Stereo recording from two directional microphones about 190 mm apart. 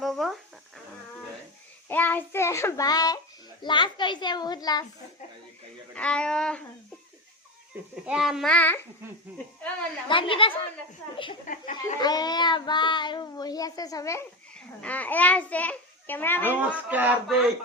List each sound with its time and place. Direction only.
0.0 s a sound: centre (ahead or behind)
1.9 s child singing: 10° left (ahead or behind)
5.9 s a child's voice: 5° left (ahead or behind)
8.0 s a child's voice: 5° right (ahead or behind)
10.1 s child singing: 25° left (ahead or behind)
11.4 s speech: 45° left (ahead or behind)
11.9 s child singing: 20° left (ahead or behind)
14.8 s a child's voice: 10° left (ahead or behind)
16.6 s a sound: 10° right (ahead or behind)